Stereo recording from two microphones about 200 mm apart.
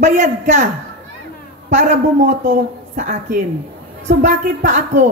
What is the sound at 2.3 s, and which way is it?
Speech, 40° right (ahead or behind).